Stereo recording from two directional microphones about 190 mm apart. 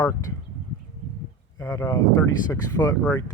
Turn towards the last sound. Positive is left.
turn(degrees=10)  # may be behind; listen again after turning